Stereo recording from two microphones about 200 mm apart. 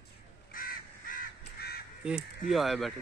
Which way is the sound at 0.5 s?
45° left (ahead or behind).